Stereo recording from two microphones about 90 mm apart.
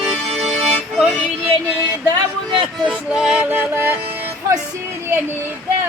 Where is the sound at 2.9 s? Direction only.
10° right (ahead or behind).